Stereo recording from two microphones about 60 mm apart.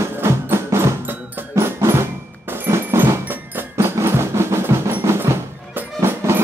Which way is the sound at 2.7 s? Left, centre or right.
Right.